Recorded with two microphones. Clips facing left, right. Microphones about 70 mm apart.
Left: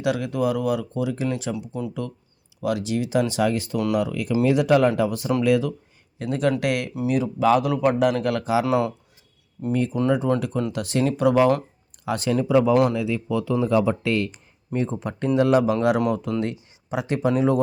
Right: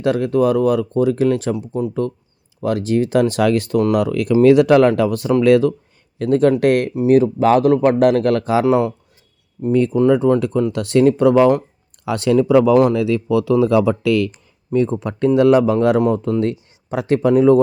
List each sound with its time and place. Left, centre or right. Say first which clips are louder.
0.0 s speech: right 7 dB; right
1.6 s speech: right 9 dB; right
8.6 s speech: right 6 dB; right
10.1 s speech: right 7 dB; right
12.0 s speech: right 7 dB; right
12.7 s speech: right 6 dB; right
13.0 s speech: right 8 dB; right
14.7 s speech: right 8 dB; right